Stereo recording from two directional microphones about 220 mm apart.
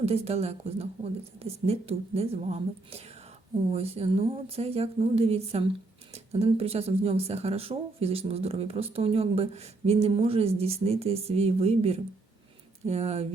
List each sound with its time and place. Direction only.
0.0 s speech: 30° right (ahead or behind)